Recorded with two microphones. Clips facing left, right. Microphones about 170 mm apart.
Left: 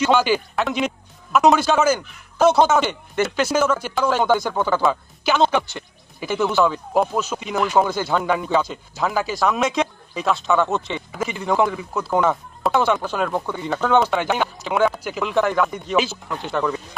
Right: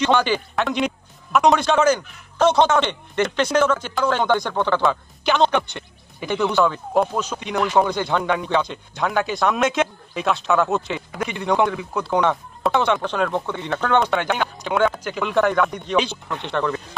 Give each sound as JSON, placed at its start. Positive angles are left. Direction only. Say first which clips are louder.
{"t": 0.0, "sound": "speech", "louder": "left 1 dB", "side_deg": 5}